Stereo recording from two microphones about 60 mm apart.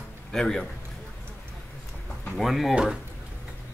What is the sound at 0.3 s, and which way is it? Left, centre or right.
Speech, centre.